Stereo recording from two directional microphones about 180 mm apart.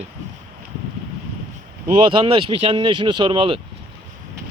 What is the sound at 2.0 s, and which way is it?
Speech, 25° right (ahead or behind).